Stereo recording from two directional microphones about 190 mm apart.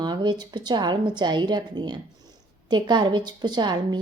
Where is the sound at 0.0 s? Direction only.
25° right (ahead or behind).